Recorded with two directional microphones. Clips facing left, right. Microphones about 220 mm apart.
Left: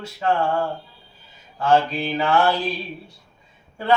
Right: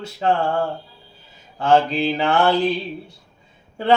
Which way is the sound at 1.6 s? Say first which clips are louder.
Right 2 dB; 25° right (ahead or behind).